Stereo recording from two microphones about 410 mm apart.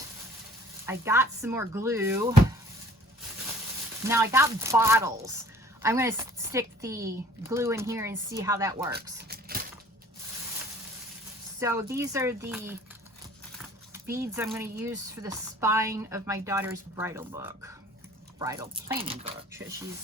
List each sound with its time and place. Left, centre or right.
0.9 s speech: centre
4.0 s speech: centre
9.1 s a sound: right
11.6 s speech: centre